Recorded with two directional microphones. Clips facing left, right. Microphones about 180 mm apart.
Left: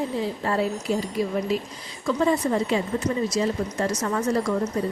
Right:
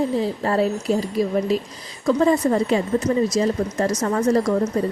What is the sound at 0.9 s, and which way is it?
Speech, 40° right (ahead or behind).